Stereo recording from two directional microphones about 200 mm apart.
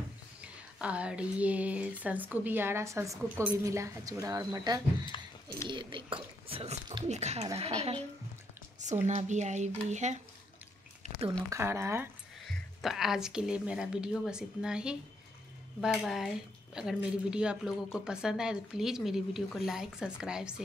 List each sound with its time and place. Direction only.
0.4 s speech: 5° right (ahead or behind)
5.1 s a sound: 25° left (ahead or behind)
5.7 s speech: 25° right (ahead or behind)
9.0 s speech: 35° right (ahead or behind)
11.0 s a sound: 30° right (ahead or behind)
11.5 s speech: 15° right (ahead or behind)
12.4 s speech: centre (ahead or behind)